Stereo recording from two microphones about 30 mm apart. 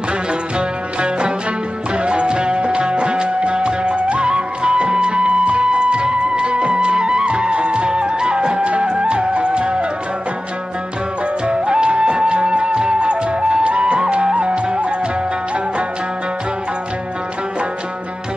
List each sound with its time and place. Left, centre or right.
0.3 s music: right
11.4 s music: right